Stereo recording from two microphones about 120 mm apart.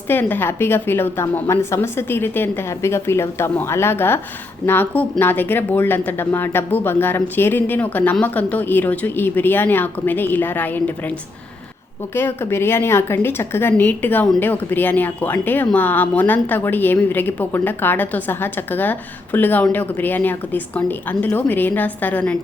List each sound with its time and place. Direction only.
0.1 s a woman's voice: 15° left (ahead or behind)